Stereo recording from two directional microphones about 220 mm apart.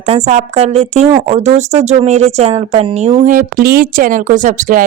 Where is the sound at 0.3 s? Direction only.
30° right (ahead or behind).